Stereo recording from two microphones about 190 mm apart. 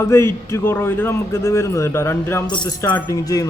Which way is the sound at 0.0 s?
15° left (ahead or behind).